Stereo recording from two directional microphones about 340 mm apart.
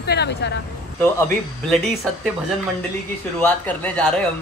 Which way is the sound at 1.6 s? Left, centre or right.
Centre.